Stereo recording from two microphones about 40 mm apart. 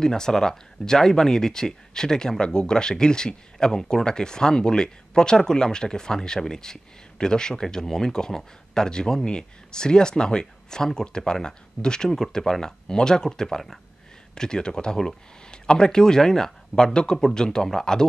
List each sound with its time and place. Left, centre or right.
0.0 s speech: centre